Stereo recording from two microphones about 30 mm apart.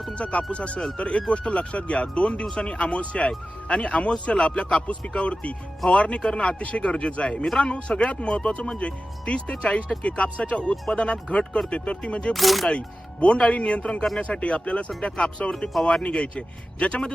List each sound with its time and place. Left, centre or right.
0.1 s speech: left
12.3 s speech: centre
12.6 s speech: left
15.7 s speech: centre
16.1 s speech: left